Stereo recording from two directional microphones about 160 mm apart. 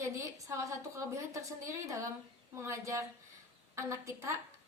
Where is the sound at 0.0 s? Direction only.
20° right (ahead or behind).